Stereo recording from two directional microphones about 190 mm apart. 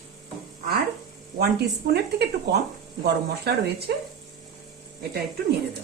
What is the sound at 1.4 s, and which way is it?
A woman's voice, 60° right (ahead or behind).